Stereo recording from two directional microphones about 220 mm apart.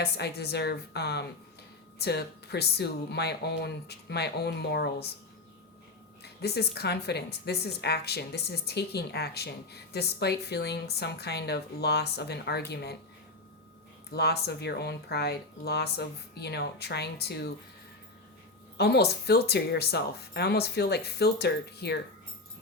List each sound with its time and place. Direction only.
0.0 s a woman's voice: 45° left (ahead or behind)
6.2 s a woman's voice: 45° left (ahead or behind)
14.1 s a woman's voice: 45° left (ahead or behind)
18.8 s a woman's voice: 45° left (ahead or behind)